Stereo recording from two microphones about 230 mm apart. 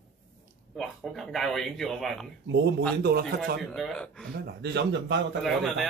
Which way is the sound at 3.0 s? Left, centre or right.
Right.